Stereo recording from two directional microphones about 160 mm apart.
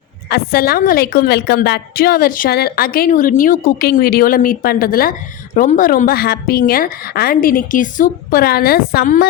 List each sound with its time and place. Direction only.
0.3 s a woman's voice: 75° left (ahead or behind)